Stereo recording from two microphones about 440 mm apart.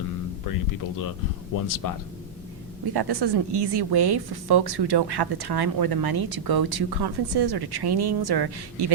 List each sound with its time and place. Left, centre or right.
1.6 s speech: left
2.8 s a woman's voice: right